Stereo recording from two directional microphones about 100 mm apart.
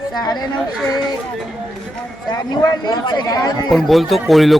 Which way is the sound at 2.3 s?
40° left (ahead or behind).